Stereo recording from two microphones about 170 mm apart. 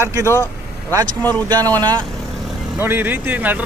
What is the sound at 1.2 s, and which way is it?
Speech, 10° left (ahead or behind).